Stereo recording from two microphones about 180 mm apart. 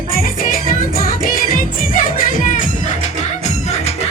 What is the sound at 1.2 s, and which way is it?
Music, 50° left (ahead or behind).